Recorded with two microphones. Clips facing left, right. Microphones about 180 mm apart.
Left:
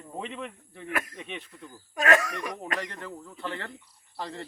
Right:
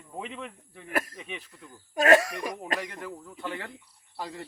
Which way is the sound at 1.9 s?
35° right (ahead or behind).